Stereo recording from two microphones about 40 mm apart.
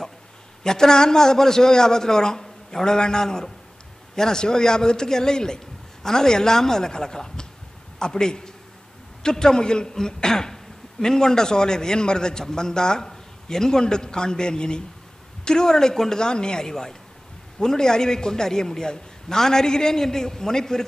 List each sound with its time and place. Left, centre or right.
0.7 s a man's voice: centre